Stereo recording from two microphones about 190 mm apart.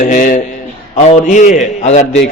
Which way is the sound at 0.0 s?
40° left (ahead or behind).